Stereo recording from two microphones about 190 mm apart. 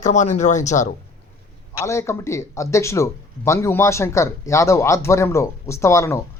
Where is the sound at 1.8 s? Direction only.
15° left (ahead or behind).